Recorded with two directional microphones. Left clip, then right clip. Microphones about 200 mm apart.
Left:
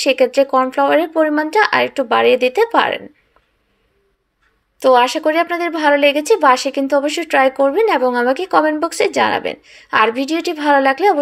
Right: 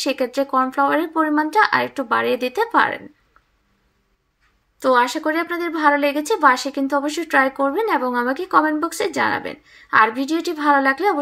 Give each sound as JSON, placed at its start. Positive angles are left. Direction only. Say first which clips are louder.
{"t": 0.0, "sound": "a woman's voice", "louder": "left 8 dB", "side_deg": -40}
{"t": 4.8, "sound": "a woman's voice", "louder": "left 5 dB", "side_deg": -40}